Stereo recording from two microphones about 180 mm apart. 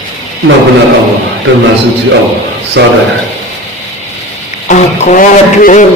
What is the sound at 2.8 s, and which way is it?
Speech, 80° right.